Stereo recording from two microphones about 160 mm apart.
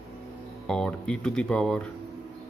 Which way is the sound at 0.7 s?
5° left (ahead or behind).